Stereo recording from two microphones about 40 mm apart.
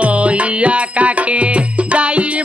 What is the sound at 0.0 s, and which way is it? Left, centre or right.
Music, right.